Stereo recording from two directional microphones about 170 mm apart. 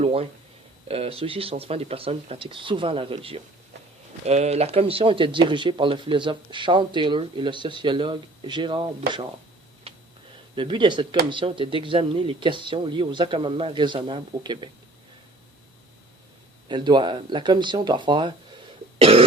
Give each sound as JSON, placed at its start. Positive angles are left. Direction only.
{"t": 0.0, "sound": "speech", "side_deg": -35}
{"t": 10.5, "sound": "speech", "side_deg": -30}
{"t": 16.6, "sound": "speech", "side_deg": -25}
{"t": 18.9, "sound": "cough", "side_deg": -35}